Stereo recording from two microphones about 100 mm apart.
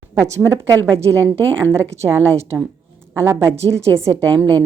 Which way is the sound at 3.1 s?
25° right (ahead or behind).